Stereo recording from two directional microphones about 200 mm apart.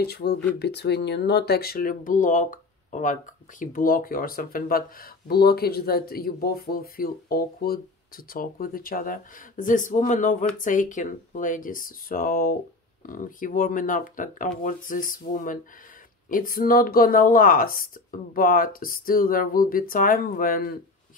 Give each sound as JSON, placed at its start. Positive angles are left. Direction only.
{"t": 0.0, "sound": "speech", "side_deg": 55}